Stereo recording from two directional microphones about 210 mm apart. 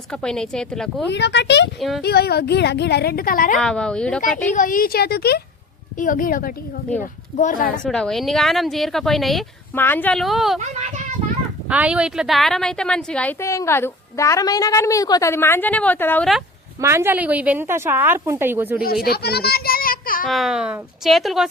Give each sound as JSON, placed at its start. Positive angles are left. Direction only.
{"t": 0.1, "sound": "speech", "side_deg": 5}
{"t": 1.1, "sound": "a woman's voice", "side_deg": 55}
{"t": 3.6, "sound": "speech", "side_deg": 5}
{"t": 4.5, "sound": "a woman's voice", "side_deg": 40}
{"t": 7.8, "sound": "speech", "side_deg": 5}
{"t": 10.6, "sound": "a child's voice", "side_deg": -35}
{"t": 11.7, "sound": "a woman's voice", "side_deg": -5}
{"t": 16.8, "sound": "a woman's voice", "side_deg": -10}
{"t": 19.0, "sound": "children playing", "side_deg": 50}
{"t": 20.3, "sound": "speech", "side_deg": 0}